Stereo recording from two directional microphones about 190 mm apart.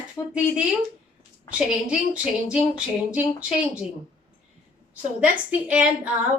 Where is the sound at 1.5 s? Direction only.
5° right (ahead or behind).